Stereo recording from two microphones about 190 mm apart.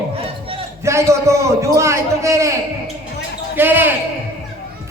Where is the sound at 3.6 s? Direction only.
10° right (ahead or behind).